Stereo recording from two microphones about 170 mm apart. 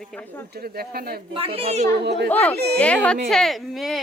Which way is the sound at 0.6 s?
65° right (ahead or behind).